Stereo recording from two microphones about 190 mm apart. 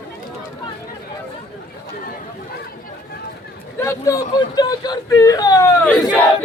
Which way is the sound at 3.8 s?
15° left (ahead or behind).